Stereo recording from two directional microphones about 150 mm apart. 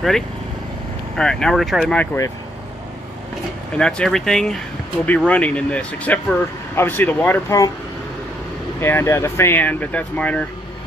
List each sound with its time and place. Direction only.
1.1 s speech: 5° left (ahead or behind)
3.7 s speech: 5° left (ahead or behind)
8.8 s speech: 15° left (ahead or behind)